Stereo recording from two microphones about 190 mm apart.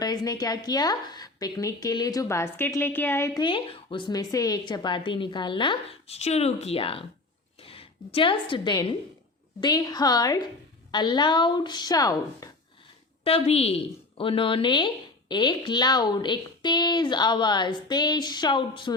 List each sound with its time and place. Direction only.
0.0 s a woman's voice: 20° left (ahead or behind)
13.2 s speech: 30° left (ahead or behind)